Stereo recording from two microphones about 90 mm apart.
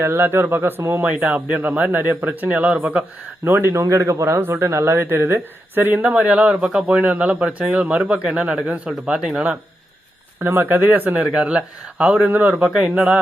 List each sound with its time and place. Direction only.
0.0 s speech: 25° right (ahead or behind)
1.1 s speech: 15° right (ahead or behind)
10.4 s speech: 25° right (ahead or behind)
11.2 s speech: 5° right (ahead or behind)